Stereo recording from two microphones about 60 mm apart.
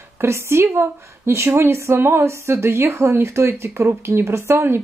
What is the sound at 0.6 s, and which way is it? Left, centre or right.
A woman's voice, right.